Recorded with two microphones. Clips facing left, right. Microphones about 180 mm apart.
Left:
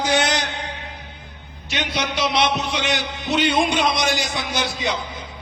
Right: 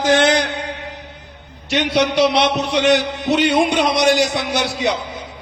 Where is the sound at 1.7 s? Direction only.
70° right (ahead or behind).